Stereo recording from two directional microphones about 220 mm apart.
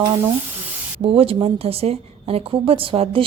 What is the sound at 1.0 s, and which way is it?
A woman's voice, 25° right (ahead or behind).